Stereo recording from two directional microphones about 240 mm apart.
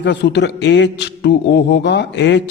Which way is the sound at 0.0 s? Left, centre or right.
Left.